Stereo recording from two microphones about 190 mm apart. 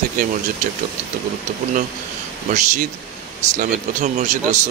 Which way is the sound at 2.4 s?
40° right (ahead or behind).